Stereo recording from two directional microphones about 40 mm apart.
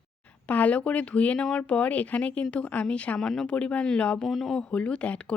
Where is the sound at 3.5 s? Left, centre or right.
Left.